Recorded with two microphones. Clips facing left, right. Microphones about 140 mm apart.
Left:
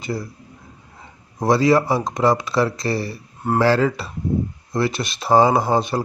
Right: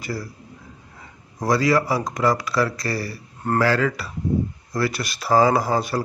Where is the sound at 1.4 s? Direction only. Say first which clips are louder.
Left 3 dB; 25° left (ahead or behind).